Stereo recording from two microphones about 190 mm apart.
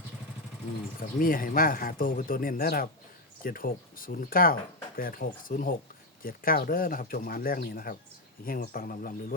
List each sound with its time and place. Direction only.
0.9 s speech: 45° left (ahead or behind)